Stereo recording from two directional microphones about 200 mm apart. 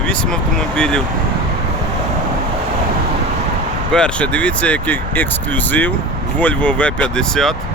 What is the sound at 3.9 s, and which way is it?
Speech, 5° left (ahead or behind).